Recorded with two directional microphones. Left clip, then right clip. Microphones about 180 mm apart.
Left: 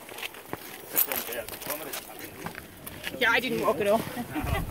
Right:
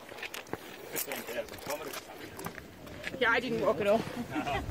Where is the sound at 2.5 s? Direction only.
50° left (ahead or behind).